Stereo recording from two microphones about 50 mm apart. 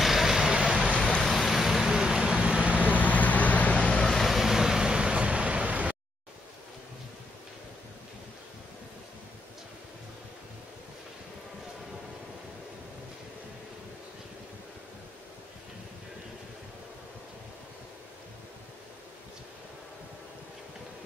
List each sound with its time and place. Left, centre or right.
0.0 s vehicle: centre
0.6 s vehicle: centre
1.2 s vehicle: centre; by 2.9 s right
2.9 s vehicle: left
4.0 s vehicle: centre; by 5.9 s right